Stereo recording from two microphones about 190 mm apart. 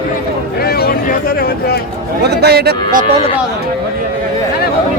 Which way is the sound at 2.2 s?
60° right (ahead or behind).